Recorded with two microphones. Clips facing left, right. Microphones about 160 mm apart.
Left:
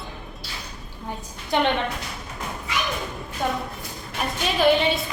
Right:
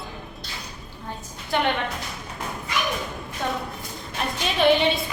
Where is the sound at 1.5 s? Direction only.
20° left (ahead or behind).